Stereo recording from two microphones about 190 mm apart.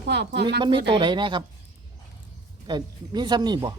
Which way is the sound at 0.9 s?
25° right (ahead or behind).